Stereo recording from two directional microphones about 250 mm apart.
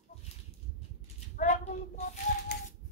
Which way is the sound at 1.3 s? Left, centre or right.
Left.